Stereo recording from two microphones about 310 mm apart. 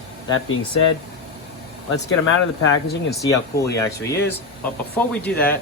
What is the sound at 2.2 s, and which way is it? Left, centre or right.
Speech, left.